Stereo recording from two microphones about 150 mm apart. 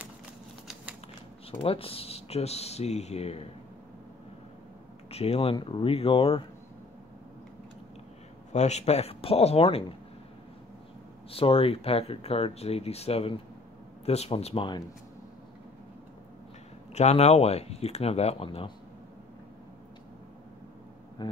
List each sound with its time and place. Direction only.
1.5 s speech: 40° left (ahead or behind)
5.1 s speech: 40° left (ahead or behind)
8.5 s speech: 50° left (ahead or behind)
11.2 s speech: 40° left (ahead or behind)
16.9 s speech: 45° left (ahead or behind)
21.2 s a sound: 30° left (ahead or behind)